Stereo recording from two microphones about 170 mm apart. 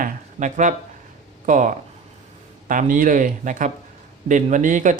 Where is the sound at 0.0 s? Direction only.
45° right (ahead or behind).